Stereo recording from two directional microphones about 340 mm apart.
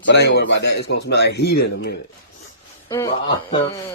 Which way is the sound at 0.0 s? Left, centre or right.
Left.